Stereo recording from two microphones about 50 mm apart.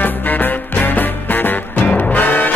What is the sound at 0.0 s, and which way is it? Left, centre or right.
Music, left.